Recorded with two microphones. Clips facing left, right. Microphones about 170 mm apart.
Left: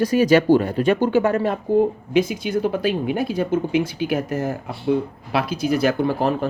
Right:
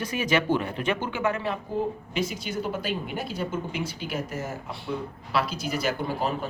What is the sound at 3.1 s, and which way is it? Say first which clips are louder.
Speech: left 9 dB; 60° left (ahead or behind).